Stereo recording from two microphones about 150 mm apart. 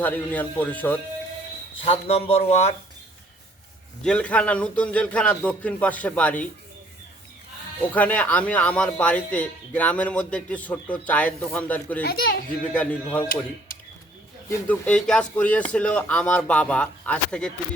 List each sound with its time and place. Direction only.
0.0 s a man's voice: 10° left (ahead or behind)
1.8 s speech: 40° left (ahead or behind)
4.0 s a man's voice: 10° left (ahead or behind)
7.8 s a man's voice: 10° left (ahead or behind)
14.7 s a man's voice: 5° left (ahead or behind)